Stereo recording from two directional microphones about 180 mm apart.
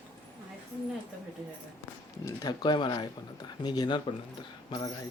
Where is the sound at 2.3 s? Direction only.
20° left (ahead or behind).